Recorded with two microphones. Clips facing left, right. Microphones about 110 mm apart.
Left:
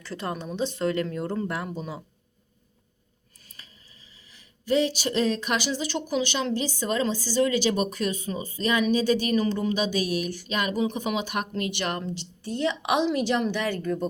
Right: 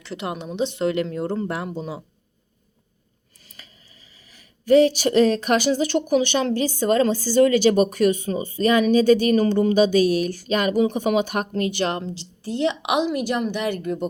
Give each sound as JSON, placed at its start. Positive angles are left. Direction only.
{"t": 0.0, "sound": "speech", "side_deg": -20}
{"t": 4.6, "sound": "speech", "side_deg": -55}
{"t": 8.4, "sound": "speech", "side_deg": -55}
{"t": 9.4, "sound": "speech", "side_deg": -65}
{"t": 10.0, "sound": "speech", "side_deg": -45}
{"t": 10.7, "sound": "speech", "side_deg": -65}
{"t": 11.3, "sound": "speech", "side_deg": -40}
{"t": 12.8, "sound": "a woman's voice", "side_deg": -15}